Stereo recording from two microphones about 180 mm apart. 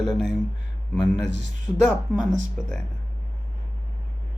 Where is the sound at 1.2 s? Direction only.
90° right.